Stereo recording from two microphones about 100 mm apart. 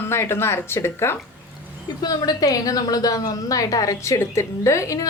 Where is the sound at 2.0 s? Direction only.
40° left (ahead or behind).